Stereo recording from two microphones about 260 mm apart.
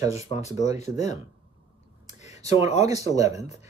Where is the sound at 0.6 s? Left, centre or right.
Left.